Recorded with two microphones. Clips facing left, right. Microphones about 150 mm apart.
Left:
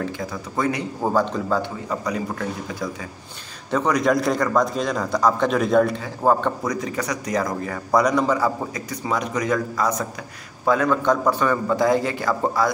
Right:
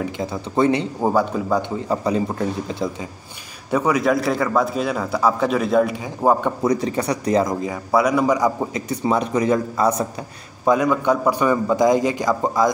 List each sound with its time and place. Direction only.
0.2 s speech: 25° right (ahead or behind)
1.0 s a man's voice: 10° right (ahead or behind)
1.6 s speech: 25° right (ahead or behind)
3.7 s a man's voice: 5° right (ahead or behind)
5.9 s a man's voice: 15° right (ahead or behind)
6.6 s speech: 30° right (ahead or behind)
7.6 s a man's voice: 10° right (ahead or behind)
8.7 s speech: 25° right (ahead or behind)
10.6 s a man's voice: 15° right (ahead or behind)